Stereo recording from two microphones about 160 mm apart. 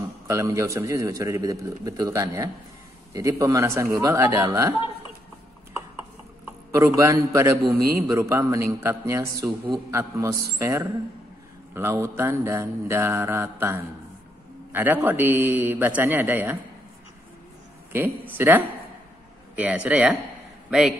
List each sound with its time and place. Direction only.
0.3 s a man's voice: 20° right (ahead or behind)
6.7 s a man's voice: 20° right (ahead or behind)
17.9 s speech: 10° right (ahead or behind)